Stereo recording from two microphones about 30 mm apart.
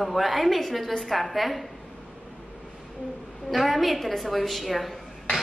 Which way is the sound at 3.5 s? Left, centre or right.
Centre.